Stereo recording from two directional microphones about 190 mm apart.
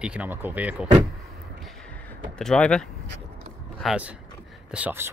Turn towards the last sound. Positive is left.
turn(degrees=-10)  # may be behind; listen again after turning